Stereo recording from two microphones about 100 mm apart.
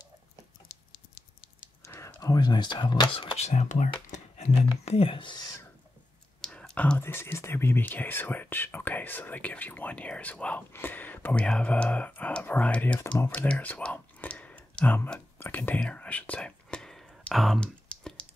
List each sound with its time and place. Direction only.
1.8 s a sound: 30° left (ahead or behind)
2.1 s speech: 40° left (ahead or behind); by 4.0 s 75° left (ahead or behind)
4.5 s speech: 90° left; by 5.5 s 50° left (ahead or behind)
6.4 s whispering: 5° left (ahead or behind)
7.0 s speech: 25° left (ahead or behind)
13.3 s clicking: 15° left (ahead or behind)
15.1 s whispering: 20° left (ahead or behind)
17.3 s speech: centre (ahead or behind)
17.6 s a sound: 10° left (ahead or behind)